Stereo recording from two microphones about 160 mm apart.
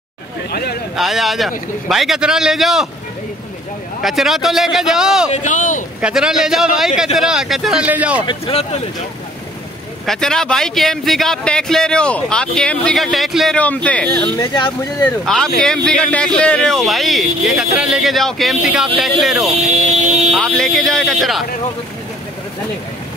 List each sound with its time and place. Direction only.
0.5 s speech: 75° left (ahead or behind)
0.9 s a man's voice: centre (ahead or behind)
4.0 s a man's voice: centre (ahead or behind)
5.3 s speech: 50° left (ahead or behind)
5.9 s a man's voice: 5° right (ahead or behind)
8.3 s speech: 35° left (ahead or behind)
10.0 s a man's voice: 5° left (ahead or behind)
14.4 s speech: 25° left (ahead or behind)
15.0 s a man's voice: 5° left (ahead or behind)
19.5 s speech: 40° right (ahead or behind)
20.2 s a man's voice: 5° left (ahead or behind)